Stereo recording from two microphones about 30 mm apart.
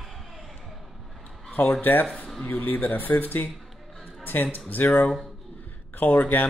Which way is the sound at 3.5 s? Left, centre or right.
Centre.